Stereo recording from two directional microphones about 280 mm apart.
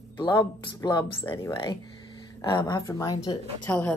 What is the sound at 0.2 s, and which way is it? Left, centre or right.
A woman's voice, centre.